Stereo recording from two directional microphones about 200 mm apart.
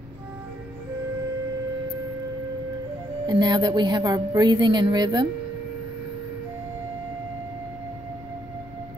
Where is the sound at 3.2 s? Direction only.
20° right (ahead or behind).